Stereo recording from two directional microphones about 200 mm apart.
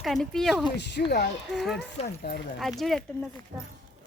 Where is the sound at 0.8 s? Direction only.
60° left (ahead or behind).